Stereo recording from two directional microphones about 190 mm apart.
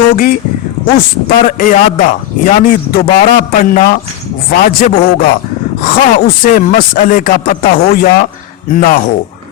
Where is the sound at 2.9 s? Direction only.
45° left (ahead or behind).